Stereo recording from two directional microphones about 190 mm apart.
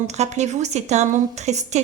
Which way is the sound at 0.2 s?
35° right (ahead or behind).